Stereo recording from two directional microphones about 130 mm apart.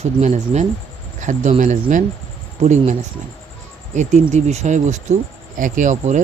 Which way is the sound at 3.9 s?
65° right (ahead or behind).